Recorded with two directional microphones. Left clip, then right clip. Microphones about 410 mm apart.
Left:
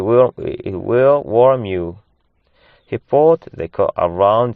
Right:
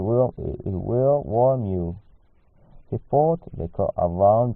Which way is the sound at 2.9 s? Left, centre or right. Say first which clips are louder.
Left 8 dB; left.